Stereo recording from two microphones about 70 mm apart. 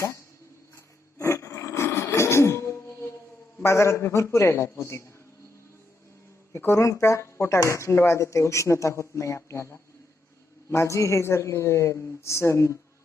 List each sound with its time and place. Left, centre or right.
1.2 s a sound: left
3.6 s a man's voice: left
6.6 s speech: left